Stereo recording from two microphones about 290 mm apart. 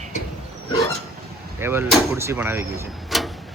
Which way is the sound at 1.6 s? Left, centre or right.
Centre.